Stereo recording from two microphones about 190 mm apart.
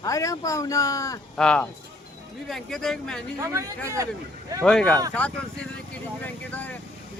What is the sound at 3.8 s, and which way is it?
Speech, 15° right (ahead or behind).